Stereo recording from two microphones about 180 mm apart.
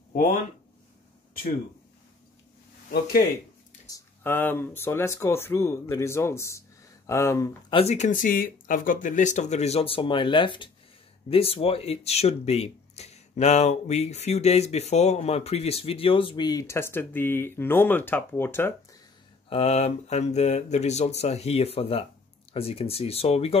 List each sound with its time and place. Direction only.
0.1 s speech: 50° left (ahead or behind)
2.9 s speech: 55° left (ahead or behind)
3.9 s speech: 10° left (ahead or behind)
7.7 s speech: 35° left (ahead or behind); by 18.7 s 10° left (ahead or behind)
19.5 s speech: 35° left (ahead or behind)